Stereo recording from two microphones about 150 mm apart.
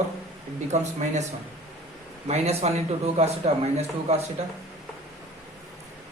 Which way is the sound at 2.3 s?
45° right (ahead or behind).